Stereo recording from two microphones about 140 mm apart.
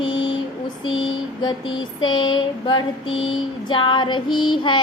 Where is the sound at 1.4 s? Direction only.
30° left (ahead or behind).